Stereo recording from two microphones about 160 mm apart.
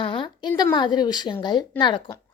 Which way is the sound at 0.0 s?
30° left (ahead or behind).